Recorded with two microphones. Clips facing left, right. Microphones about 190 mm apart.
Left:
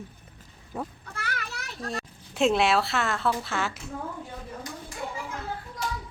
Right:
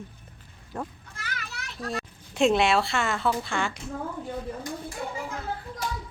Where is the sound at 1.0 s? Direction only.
60° left (ahead or behind).